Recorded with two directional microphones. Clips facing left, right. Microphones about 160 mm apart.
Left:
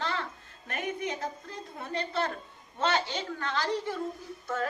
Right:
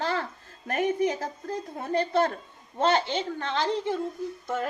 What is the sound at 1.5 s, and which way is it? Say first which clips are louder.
Speech: right 8 dB; 40° right (ahead or behind).